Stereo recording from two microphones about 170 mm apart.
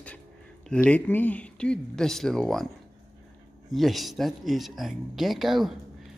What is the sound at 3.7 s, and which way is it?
Speech, centre (ahead or behind).